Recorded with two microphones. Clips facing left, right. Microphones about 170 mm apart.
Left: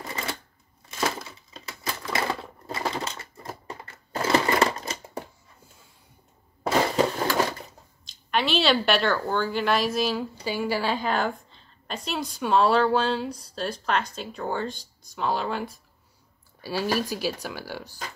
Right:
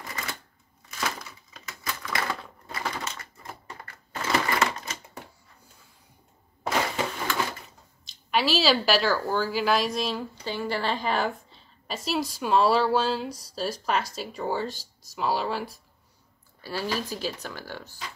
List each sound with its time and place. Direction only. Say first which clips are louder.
0.0 s shuffling cards: left 4 dB; 30° left (ahead or behind)
1.5 s typewriter: left 2 dB; 30° left (ahead or behind)
4.1 s crushing: left 4 dB; 35° left (ahead or behind)
7.0 s a sound: left 6 dB; 35° left (ahead or behind)
8.0 s speech: even; centre (ahead or behind)
16.6 s speech: left 4 dB; 15° left (ahead or behind)